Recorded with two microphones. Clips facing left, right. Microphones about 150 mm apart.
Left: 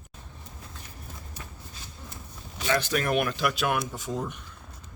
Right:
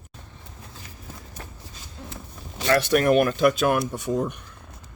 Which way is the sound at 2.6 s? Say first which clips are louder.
Right 6 dB; 60° right (ahead or behind).